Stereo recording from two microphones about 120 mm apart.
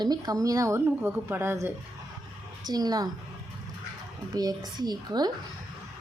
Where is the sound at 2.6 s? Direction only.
35° right (ahead or behind).